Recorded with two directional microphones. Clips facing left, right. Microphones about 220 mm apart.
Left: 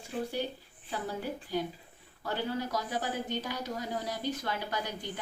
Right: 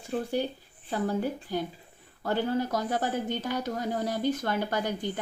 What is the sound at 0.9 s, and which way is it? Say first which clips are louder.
A woman's voice: right 7 dB; 50° right (ahead or behind).